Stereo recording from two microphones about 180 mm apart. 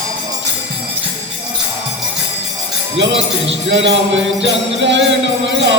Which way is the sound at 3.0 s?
90° right.